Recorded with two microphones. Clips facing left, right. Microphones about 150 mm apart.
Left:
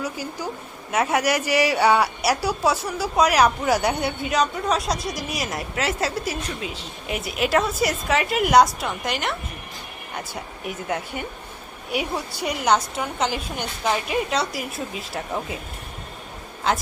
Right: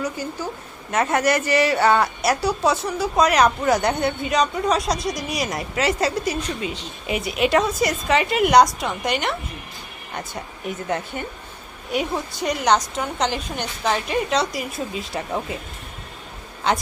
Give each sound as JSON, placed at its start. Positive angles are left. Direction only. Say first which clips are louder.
{"t": 0.0, "sound": "a woman's voice", "louder": "right 2 dB", "side_deg": 10}
{"t": 16.7, "sound": "a woman's voice", "louder": "right 1 dB", "side_deg": 0}